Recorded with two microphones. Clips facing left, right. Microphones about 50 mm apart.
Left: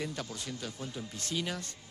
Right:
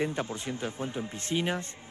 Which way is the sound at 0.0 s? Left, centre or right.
Right.